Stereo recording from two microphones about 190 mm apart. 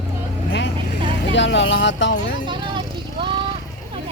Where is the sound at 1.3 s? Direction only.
70° left (ahead or behind).